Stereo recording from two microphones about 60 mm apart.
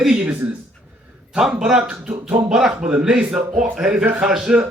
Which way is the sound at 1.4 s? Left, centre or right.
Centre.